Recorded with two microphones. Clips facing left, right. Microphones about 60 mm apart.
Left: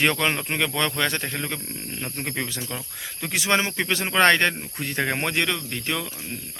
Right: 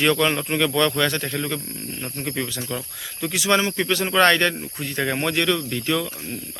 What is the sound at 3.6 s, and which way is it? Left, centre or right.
Speech, left.